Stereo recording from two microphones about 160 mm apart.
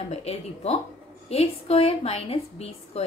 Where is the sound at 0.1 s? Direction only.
40° left (ahead or behind).